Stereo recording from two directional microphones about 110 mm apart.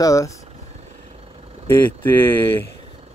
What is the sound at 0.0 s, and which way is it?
Speech, 30° left (ahead or behind).